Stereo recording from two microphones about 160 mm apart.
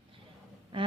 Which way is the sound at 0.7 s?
30° right (ahead or behind).